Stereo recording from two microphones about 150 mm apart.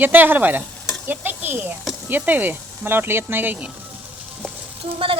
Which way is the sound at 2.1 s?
10° right (ahead or behind).